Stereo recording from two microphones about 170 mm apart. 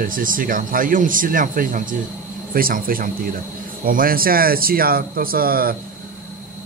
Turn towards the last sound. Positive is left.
turn(degrees=-60)  # may be behind; listen again after turning